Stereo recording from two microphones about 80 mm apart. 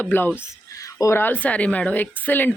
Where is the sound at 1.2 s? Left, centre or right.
Left.